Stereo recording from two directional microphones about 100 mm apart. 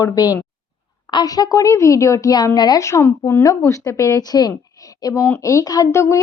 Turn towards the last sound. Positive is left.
turn(degrees=30)  # may be behind; listen again after turning